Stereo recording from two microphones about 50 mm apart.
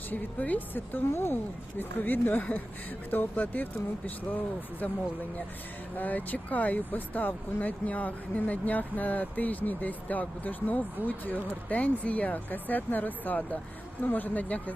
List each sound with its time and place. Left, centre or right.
0.1 s speech: left
1.0 s speech: left
1.8 s speech: left
6.0 s speech: left